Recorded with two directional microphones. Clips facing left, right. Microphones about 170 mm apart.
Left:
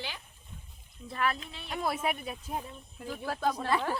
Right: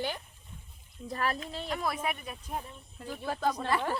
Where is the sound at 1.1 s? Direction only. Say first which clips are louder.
Even; 40° right (ahead or behind).